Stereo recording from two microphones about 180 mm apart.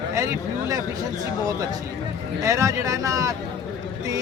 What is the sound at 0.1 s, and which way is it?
Speech, 15° right (ahead or behind).